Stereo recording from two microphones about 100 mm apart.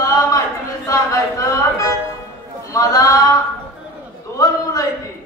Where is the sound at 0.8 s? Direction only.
30° left (ahead or behind).